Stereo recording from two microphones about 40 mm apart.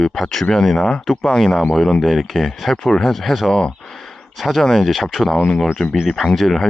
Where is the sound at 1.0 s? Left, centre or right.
Centre.